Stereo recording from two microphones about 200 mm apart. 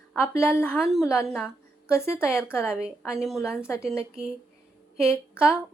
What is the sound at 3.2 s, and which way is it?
A woman's voice, centre (ahead or behind).